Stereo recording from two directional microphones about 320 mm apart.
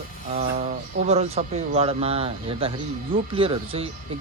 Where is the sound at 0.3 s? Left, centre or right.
Centre.